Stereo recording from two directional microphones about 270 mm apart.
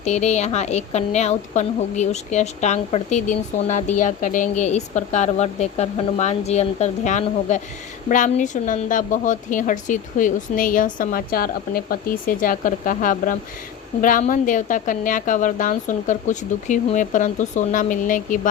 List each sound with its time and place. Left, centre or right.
0.0 s a woman's voice: left